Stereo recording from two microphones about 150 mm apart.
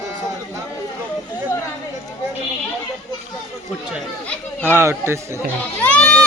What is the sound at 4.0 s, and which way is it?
Speech, 10° left (ahead or behind).